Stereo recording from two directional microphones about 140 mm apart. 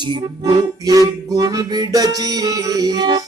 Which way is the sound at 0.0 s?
30° right (ahead or behind).